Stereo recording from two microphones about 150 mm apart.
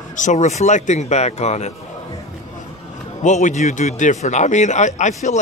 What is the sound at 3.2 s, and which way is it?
A man's voice, 50° left (ahead or behind).